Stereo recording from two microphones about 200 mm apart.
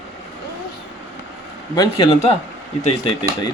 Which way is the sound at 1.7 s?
25° left (ahead or behind).